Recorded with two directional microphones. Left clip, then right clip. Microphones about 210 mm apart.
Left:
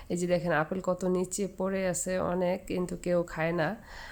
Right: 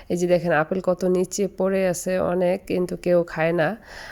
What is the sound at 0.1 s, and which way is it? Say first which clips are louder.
Speech: right 8 dB; 30° right (ahead or behind).